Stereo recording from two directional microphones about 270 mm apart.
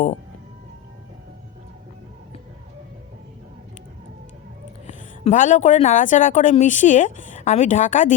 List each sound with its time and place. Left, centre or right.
4.9 s a woman's voice: left